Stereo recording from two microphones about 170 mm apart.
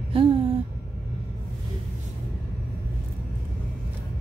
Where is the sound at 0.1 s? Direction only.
35° right (ahead or behind).